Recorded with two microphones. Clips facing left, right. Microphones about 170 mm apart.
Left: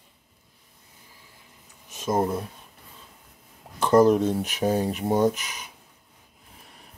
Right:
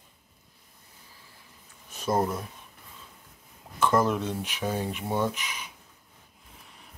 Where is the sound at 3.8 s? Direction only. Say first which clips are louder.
Left 7 dB; 35° left (ahead or behind).